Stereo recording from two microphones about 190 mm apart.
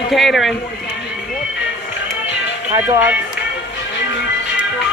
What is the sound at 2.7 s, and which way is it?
Speech, 15° right (ahead or behind).